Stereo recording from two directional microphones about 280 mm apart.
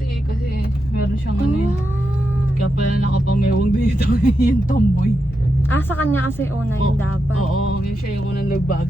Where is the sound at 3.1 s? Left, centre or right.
Left.